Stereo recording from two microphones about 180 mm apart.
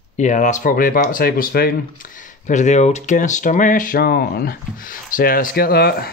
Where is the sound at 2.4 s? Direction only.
40° left (ahead or behind).